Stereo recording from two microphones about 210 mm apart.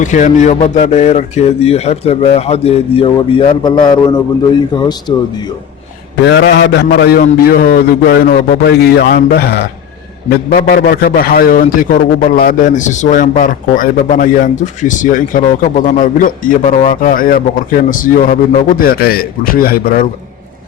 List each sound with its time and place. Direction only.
0.0 s speech: 35° left (ahead or behind); by 5.5 s 20° left (ahead or behind)
6.2 s a man's voice: 60° left (ahead or behind)